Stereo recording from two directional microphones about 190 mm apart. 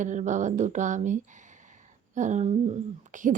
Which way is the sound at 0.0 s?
40° right (ahead or behind).